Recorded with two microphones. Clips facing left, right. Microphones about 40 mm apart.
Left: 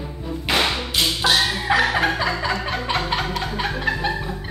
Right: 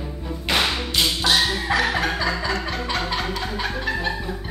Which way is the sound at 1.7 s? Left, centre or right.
Left.